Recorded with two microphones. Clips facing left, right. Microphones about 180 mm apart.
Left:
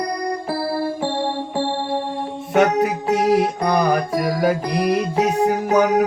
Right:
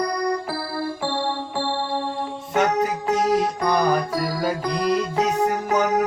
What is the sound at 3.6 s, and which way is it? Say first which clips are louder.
Music: left 2 dB; 65° left (ahead or behind).